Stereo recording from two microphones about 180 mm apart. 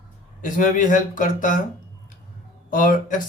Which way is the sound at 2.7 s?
45° left (ahead or behind).